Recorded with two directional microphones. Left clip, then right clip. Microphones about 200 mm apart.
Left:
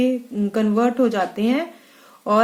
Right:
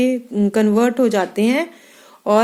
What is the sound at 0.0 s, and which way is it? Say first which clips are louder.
Speech: right 3 dB; 35° right (ahead or behind).